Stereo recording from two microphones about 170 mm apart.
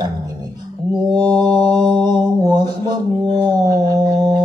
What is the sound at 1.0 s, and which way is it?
Mantra, 25° right (ahead or behind).